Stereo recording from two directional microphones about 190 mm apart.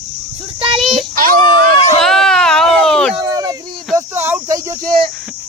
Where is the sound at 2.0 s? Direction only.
Centre (ahead or behind).